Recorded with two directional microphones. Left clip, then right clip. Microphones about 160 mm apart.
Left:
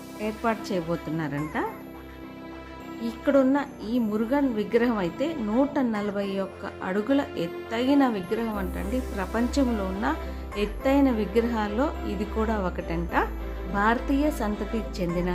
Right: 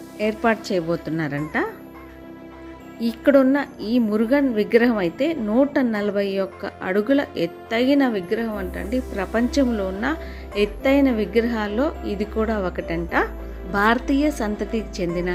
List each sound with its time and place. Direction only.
0.2 s a woman's voice: 20° right (ahead or behind)
3.0 s a woman's voice: 25° right (ahead or behind); by 15.3 s 5° right (ahead or behind)